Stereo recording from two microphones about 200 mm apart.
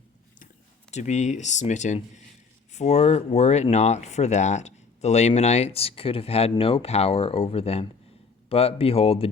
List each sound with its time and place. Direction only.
0.9 s speech: 35° left (ahead or behind)